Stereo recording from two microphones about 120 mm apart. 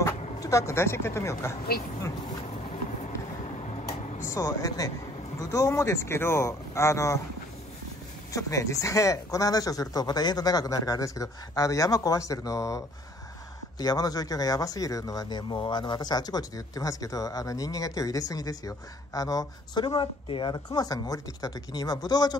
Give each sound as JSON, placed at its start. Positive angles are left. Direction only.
{"t": 0.0, "sound": "speech", "side_deg": 25}
{"t": 4.3, "sound": "speech", "side_deg": 30}
{"t": 8.4, "sound": "speech", "side_deg": 25}
{"t": 20.5, "sound": "speech", "side_deg": 30}